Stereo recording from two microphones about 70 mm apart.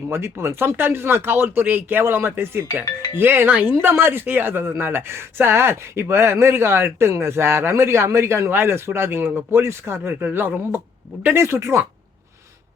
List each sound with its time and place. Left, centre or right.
0.1 s speech: right